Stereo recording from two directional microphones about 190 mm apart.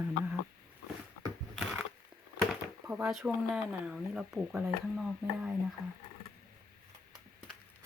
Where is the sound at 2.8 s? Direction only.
15° right (ahead or behind).